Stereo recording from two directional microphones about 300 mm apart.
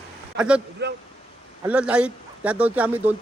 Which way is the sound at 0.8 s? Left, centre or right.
Right.